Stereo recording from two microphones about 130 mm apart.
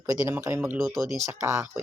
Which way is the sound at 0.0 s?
30° right (ahead or behind).